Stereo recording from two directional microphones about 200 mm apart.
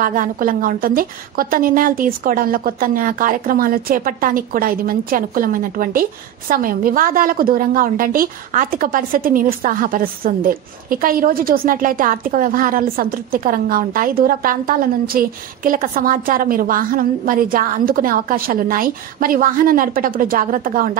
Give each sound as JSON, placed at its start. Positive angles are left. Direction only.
{"t": 0.0, "sound": "a woman's voice", "side_deg": -45}